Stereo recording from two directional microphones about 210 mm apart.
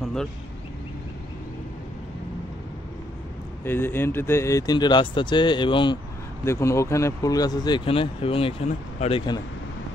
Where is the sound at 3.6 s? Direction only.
10° left (ahead or behind); by 9.2 s 30° left (ahead or behind).